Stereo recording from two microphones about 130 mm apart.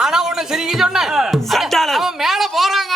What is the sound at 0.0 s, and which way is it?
A man's voice, 5° right (ahead or behind).